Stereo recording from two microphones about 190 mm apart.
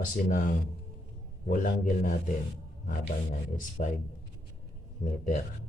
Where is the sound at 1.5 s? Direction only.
45° left (ahead or behind).